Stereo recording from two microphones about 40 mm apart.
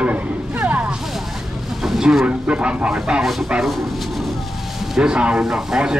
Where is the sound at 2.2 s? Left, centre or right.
Right.